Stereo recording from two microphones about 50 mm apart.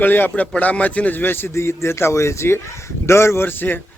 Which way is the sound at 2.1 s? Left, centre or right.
Left.